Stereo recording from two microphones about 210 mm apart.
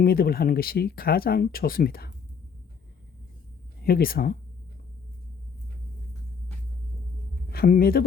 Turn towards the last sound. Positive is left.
turn(degrees=45)  # may be behind; listen again after turning